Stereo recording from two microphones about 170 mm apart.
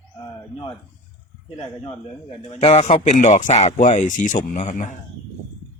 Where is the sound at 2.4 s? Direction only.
35° left (ahead or behind).